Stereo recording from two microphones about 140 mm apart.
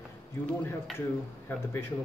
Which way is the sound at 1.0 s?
15° left (ahead or behind).